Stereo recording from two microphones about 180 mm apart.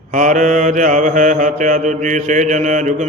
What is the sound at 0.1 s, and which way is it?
Mantra, 45° right (ahead or behind).